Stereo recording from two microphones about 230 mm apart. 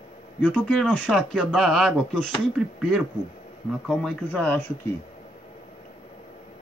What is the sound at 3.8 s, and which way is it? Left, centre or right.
Speech, centre.